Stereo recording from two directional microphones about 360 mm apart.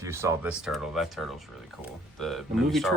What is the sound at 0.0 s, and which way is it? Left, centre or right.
Speech, centre.